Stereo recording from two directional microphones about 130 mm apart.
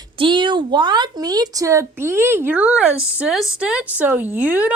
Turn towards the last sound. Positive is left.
turn(degrees=-10)  # may be behind; listen again after turning